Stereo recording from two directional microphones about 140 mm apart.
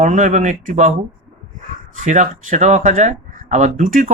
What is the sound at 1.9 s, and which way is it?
Speech, 65° right (ahead or behind).